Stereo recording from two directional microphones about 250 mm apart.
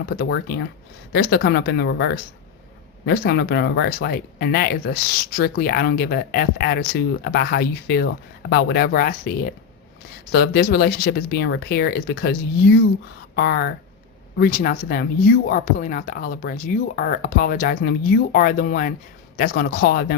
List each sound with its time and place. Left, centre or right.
0.2 s speech: left